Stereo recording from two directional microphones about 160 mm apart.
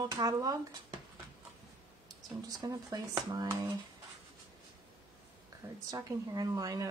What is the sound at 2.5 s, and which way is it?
Speech, 25° right (ahead or behind).